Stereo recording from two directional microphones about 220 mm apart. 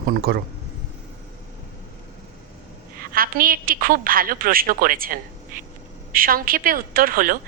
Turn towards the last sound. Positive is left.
turn(degrees=-40)  # may be behind; listen again after turning